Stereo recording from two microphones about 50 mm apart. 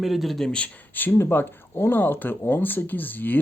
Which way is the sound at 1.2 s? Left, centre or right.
Left.